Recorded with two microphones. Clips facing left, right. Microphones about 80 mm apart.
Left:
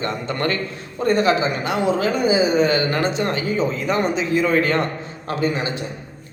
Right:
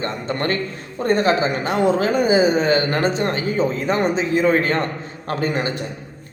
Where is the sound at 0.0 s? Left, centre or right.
Right.